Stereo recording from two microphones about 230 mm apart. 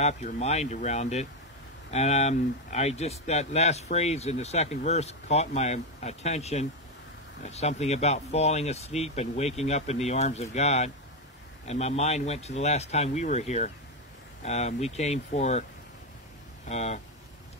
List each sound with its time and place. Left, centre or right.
0.0 s speech: left
16.6 s speech: left